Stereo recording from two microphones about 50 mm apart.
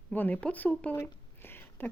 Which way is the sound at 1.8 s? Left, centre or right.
Left.